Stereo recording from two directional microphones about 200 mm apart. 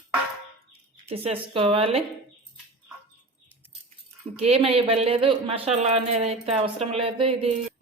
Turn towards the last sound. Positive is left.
turn(degrees=-25)  # may be behind; listen again after turning